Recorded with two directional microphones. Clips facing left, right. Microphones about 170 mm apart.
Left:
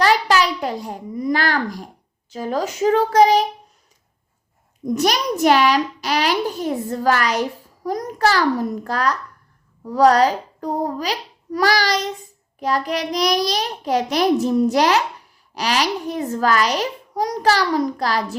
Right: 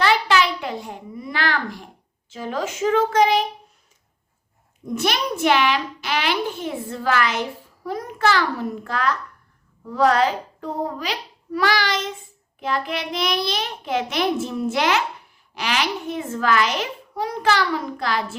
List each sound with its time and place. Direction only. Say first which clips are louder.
0.0 s babbling: left 2 dB; 40° left (ahead or behind)
2.3 s a child's voice: left 4 dB; 40° left (ahead or behind)
4.9 s a child's voice: left 3 dB; 40° left (ahead or behind)